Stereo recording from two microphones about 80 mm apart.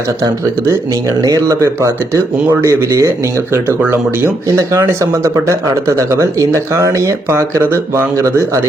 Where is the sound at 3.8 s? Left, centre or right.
Right.